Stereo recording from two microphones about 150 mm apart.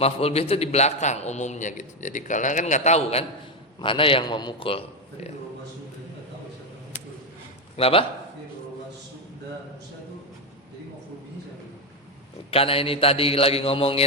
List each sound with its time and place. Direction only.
0.0 s a man's voice: 40° left (ahead or behind)
3.8 s a man's voice: 35° left (ahead or behind)
7.8 s a man's voice: 40° left (ahead or behind)
12.5 s a man's voice: 40° left (ahead or behind)